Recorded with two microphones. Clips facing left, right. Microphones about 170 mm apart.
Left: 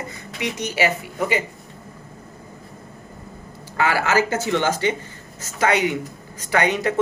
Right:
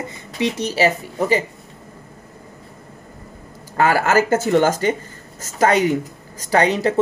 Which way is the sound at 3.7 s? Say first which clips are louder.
Right 4 dB; 45° right (ahead or behind).